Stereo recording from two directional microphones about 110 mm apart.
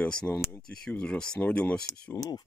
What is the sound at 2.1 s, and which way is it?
Speech, 35° left (ahead or behind).